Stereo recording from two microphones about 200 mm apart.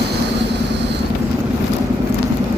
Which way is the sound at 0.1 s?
60° right (ahead or behind).